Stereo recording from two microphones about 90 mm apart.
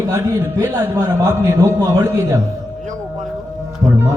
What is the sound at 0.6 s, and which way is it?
A man's voice, 35° right (ahead or behind).